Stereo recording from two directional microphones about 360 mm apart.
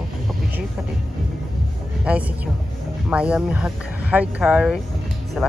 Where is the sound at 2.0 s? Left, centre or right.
Centre.